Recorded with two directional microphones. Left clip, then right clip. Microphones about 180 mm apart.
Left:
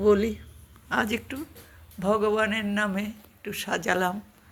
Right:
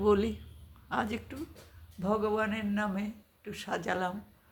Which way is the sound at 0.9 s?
25° left (ahead or behind).